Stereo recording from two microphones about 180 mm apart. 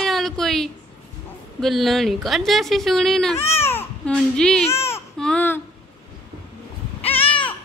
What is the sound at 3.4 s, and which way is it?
Baby cry, 10° left (ahead or behind).